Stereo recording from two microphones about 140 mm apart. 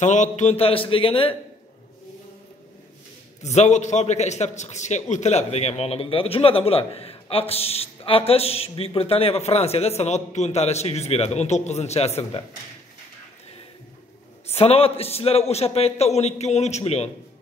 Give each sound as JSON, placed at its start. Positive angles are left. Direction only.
{"t": 0.0, "sound": "a man's voice", "side_deg": 60}
{"t": 3.4, "sound": "a man's voice", "side_deg": 55}
{"t": 14.5, "sound": "a man's voice", "side_deg": 45}